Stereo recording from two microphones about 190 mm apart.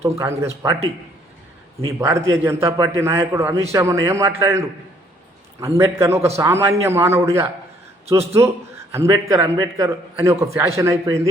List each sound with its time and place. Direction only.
0.0 s a man's voice: 15° right (ahead or behind)
1.9 s a man's voice: 15° right (ahead or behind)